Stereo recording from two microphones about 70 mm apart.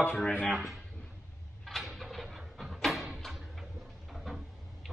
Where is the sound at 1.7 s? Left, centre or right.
Centre.